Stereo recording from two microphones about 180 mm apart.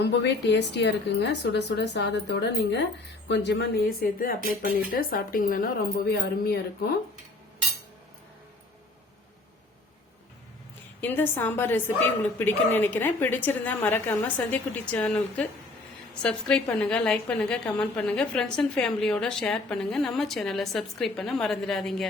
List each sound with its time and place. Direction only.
0.0 s a woman's voice: 75° left (ahead or behind)
11.0 s a woman's voice: 10° left (ahead or behind)